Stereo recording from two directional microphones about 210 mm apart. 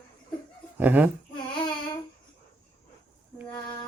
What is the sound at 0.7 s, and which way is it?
Speech, 10° right (ahead or behind).